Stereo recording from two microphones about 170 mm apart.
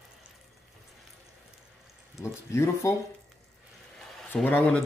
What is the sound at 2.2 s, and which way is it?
Speech, 15° left (ahead or behind).